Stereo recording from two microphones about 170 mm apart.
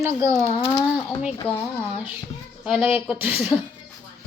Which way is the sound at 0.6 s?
25° left (ahead or behind).